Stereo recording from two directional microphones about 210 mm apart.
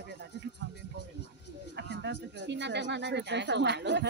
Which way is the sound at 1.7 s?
55° right (ahead or behind).